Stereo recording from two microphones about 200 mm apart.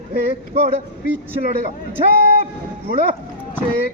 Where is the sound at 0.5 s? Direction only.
50° right (ahead or behind).